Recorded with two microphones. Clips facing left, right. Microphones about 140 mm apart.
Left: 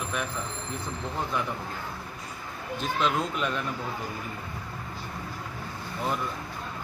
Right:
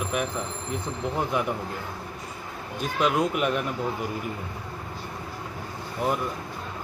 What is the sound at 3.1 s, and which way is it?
Speech, 15° right (ahead or behind).